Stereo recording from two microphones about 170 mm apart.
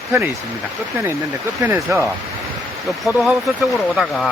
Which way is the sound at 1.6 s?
10° right (ahead or behind).